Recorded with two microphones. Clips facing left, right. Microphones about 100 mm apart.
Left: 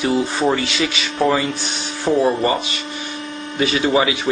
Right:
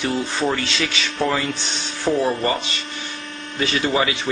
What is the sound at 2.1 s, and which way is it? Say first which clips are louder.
Speech: left 3 dB; 15° left (ahead or behind).